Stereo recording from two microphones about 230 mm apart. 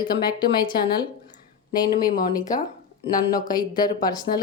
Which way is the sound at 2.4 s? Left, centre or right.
Centre.